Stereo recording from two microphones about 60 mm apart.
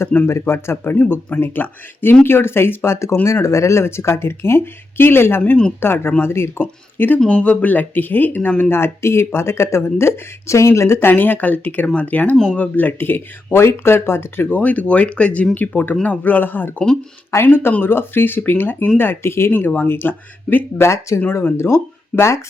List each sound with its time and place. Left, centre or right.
0.3 s speech: left
7.2 s speech: centre
8.7 s speech: left
11.1 s speech: left
14.6 s speech: left
20.8 s speech: left